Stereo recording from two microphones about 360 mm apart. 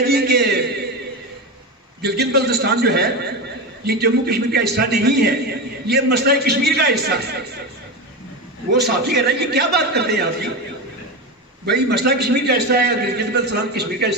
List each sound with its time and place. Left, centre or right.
0.0 s a sound: right
2.0 s a man's voice: right
8.7 s a man's voice: right
11.6 s a man's voice: right